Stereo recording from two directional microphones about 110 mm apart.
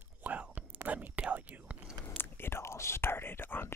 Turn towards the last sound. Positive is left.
turn(degrees=20)  # may be behind; listen again after turning